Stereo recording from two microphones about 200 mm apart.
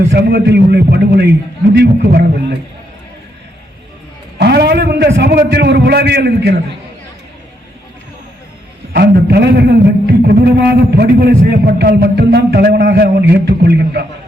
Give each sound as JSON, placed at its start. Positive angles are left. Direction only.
{"t": 0.1, "sound": "a man's voice", "side_deg": -55}
{"t": 4.4, "sound": "a man's voice", "side_deg": -55}
{"t": 8.9, "sound": "a man's voice", "side_deg": -50}